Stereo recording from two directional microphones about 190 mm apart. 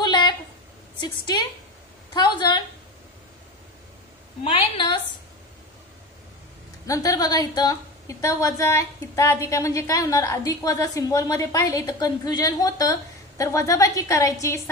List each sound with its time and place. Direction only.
0.0 s a sound: 25° left (ahead or behind)
2.1 s a woman's voice: 25° left (ahead or behind)
4.5 s a woman's voice: 30° left (ahead or behind)
6.9 s a woman's voice: 20° left (ahead or behind)